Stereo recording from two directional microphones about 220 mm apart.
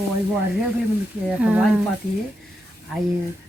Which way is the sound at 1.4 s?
5° right (ahead or behind).